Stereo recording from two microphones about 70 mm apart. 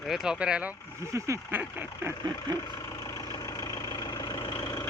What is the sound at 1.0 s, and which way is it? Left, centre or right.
Speech, right.